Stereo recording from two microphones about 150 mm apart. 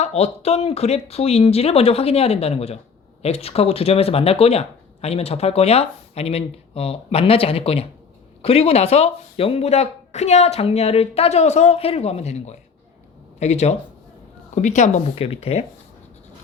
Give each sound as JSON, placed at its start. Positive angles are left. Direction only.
{"t": 0.0, "sound": "speech", "side_deg": 45}